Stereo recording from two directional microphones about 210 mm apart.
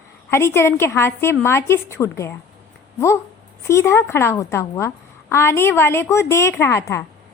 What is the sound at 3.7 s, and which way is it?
A woman's voice, 15° left (ahead or behind).